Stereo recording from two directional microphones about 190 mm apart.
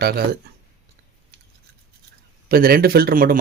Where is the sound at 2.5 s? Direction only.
50° right (ahead or behind).